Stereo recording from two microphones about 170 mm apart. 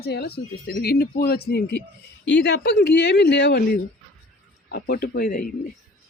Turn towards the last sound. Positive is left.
turn(degrees=55)  # may be behind; listen again after turning